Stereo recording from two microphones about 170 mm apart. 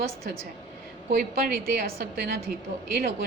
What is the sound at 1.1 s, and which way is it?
A woman's voice, 60° right (ahead or behind).